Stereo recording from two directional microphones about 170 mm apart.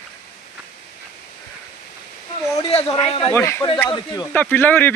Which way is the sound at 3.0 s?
30° left (ahead or behind).